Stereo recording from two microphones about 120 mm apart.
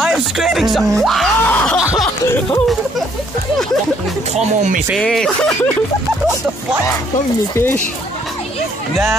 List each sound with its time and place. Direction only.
0.0 s speech: 5° right (ahead or behind)
0.9 s music: centre (ahead or behind)
1.4 s snicker: 15° left (ahead or behind)
2.2 s music: 25° left (ahead or behind)
4.9 s speech: 5° left (ahead or behind)
7.5 s speech: 20° left (ahead or behind)